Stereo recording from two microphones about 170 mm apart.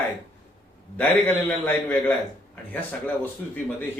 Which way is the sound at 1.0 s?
10° left (ahead or behind).